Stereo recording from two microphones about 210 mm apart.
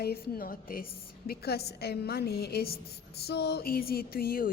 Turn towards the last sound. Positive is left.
turn(degrees=45)  # may be behind; listen again after turning